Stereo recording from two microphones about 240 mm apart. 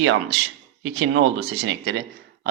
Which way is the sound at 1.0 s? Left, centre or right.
Right.